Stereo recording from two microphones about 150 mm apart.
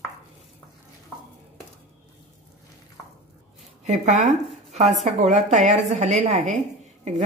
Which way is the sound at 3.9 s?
50° right (ahead or behind).